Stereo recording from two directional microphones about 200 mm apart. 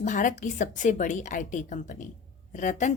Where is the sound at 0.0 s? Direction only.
40° left (ahead or behind).